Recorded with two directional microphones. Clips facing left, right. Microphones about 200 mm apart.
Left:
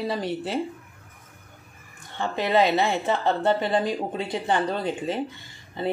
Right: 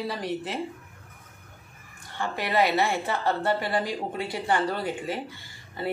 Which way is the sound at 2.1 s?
20° left (ahead or behind).